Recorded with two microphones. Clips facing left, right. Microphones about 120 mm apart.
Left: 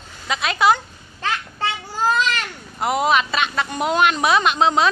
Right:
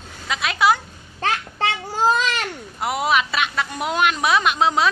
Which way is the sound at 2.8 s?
5° right (ahead or behind).